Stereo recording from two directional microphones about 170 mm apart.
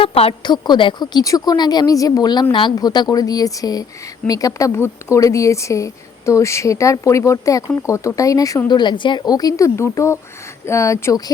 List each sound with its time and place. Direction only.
0.0 s a woman's voice: 35° left (ahead or behind); by 11.2 s 15° left (ahead or behind)